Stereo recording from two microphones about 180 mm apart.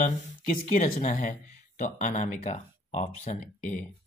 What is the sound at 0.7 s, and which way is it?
Speech, 45° left (ahead or behind).